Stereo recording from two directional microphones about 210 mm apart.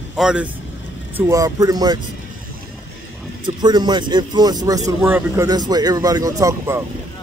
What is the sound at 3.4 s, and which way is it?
A man's voice, 20° right (ahead or behind).